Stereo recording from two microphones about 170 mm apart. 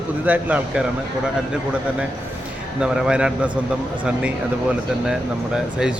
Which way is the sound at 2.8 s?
5° right (ahead or behind).